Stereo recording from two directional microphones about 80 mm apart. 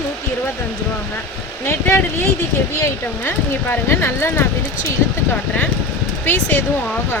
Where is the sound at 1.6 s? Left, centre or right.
Left.